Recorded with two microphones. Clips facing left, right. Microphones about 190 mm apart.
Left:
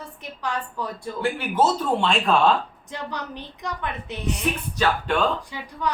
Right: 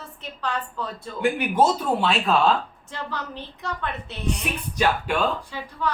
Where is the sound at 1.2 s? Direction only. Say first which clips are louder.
Right 2 dB; 15° right (ahead or behind).